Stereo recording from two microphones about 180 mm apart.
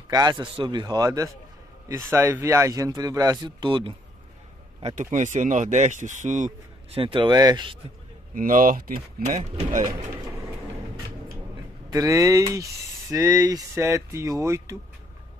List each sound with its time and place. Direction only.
0.1 s speech: 25° right (ahead or behind)
4.8 s speech: 45° right (ahead or behind)
7.0 s speech: 30° right (ahead or behind)
8.4 s speech: 50° right (ahead or behind)
11.9 s speech: 20° right (ahead or behind)